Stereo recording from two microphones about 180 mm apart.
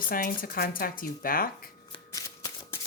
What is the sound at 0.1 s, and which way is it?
Speech, 55° left (ahead or behind).